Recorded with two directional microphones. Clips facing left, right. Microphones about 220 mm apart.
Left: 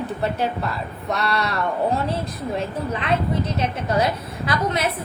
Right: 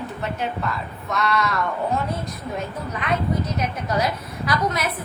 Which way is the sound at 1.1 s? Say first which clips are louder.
Right 1 dB; 35° left (ahead or behind).